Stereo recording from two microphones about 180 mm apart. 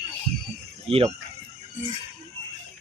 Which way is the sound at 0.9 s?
30° right (ahead or behind).